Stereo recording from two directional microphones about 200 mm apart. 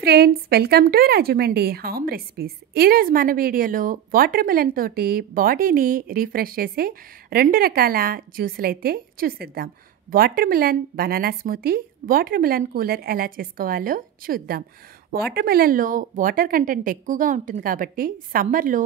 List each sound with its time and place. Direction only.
0.0 s a woman's voice: 55° right (ahead or behind)